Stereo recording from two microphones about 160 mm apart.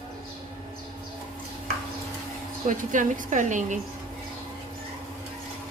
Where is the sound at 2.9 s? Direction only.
55° right (ahead or behind).